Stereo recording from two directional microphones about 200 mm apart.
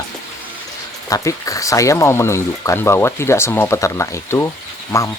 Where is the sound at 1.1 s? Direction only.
15° left (ahead or behind).